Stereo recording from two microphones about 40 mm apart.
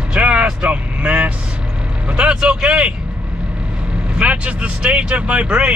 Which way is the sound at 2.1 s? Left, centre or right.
Right.